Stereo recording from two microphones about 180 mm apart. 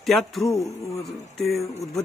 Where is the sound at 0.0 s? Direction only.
Centre (ahead or behind).